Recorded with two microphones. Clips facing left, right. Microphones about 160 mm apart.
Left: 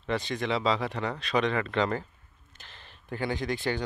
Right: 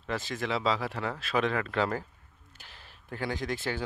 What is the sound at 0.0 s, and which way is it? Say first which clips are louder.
Speech: left 3 dB; 5° right (ahead or behind).